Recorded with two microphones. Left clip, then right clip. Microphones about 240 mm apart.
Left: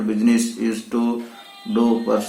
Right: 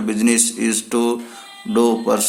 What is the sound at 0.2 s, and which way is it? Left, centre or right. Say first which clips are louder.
A man's voice: right 3 dB; right.